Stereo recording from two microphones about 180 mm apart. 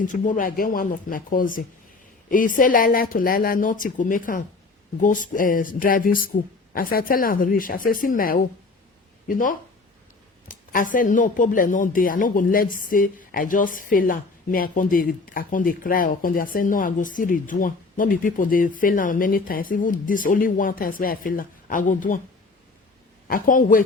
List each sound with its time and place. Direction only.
0.0 s speech: 45° left (ahead or behind)
23.3 s speech: 50° left (ahead or behind)